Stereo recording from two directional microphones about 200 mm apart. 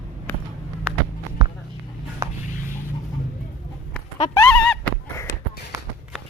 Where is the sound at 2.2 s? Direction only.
20° right (ahead or behind).